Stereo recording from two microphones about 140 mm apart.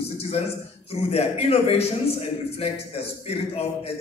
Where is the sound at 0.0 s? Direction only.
45° left (ahead or behind).